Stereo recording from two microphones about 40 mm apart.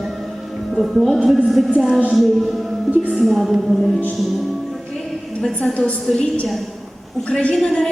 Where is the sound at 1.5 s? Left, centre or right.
Centre.